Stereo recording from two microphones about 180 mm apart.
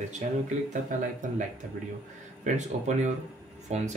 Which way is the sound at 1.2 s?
45° right (ahead or behind).